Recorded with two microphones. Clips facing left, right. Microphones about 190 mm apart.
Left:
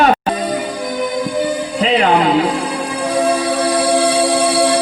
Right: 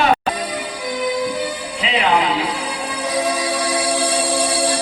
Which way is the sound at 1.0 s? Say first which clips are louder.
Left 2 dB; 50° left (ahead or behind).